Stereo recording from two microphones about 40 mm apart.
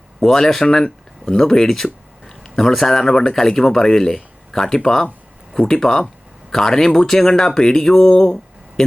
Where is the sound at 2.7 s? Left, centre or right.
Centre.